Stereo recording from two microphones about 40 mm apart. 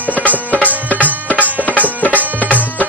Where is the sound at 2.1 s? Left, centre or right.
Right.